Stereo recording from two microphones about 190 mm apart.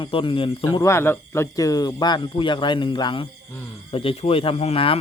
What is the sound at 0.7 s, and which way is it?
A man's voice, 15° left (ahead or behind).